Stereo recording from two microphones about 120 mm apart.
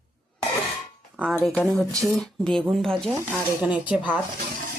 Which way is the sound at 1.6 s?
Centre (ahead or behind).